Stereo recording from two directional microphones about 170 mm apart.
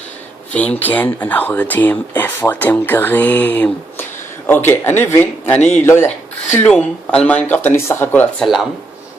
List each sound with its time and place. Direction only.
0.5 s speech: 10° left (ahead or behind)